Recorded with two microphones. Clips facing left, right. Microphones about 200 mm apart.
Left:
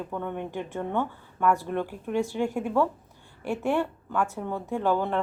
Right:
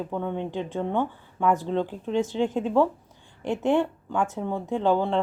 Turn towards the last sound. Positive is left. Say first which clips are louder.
# right 3 dB
turn(degrees=-15)  # may be behind; listen again after turning